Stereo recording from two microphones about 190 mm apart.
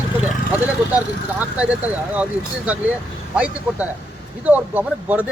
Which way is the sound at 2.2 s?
5° right (ahead or behind).